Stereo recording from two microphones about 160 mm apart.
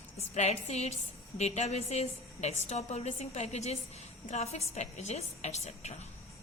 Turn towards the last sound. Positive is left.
turn(degrees=45)  # may be behind; listen again after turning